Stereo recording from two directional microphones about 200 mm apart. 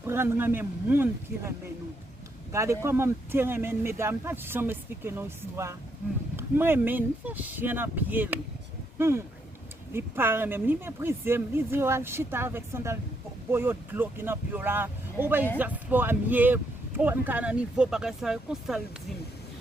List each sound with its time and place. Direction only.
0.0 s speech: 10° right (ahead or behind)